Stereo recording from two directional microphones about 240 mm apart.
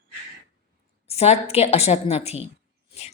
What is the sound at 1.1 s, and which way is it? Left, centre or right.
A woman's voice, left.